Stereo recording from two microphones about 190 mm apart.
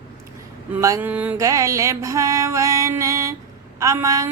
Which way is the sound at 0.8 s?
15° right (ahead or behind).